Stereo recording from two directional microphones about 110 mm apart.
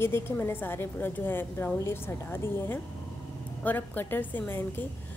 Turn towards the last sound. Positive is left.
turn(degrees=15)  # may be behind; listen again after turning